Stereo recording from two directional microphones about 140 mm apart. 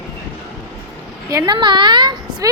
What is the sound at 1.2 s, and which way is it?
Speech, 25° right (ahead or behind).